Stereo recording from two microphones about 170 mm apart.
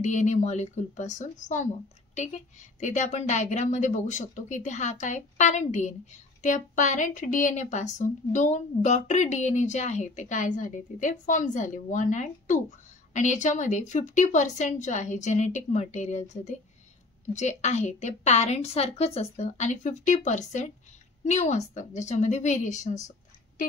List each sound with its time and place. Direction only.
0.0 s a woman's voice: 45° left (ahead or behind)